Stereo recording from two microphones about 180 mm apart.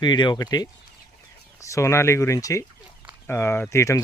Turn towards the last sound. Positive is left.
turn(degrees=15)  # may be behind; listen again after turning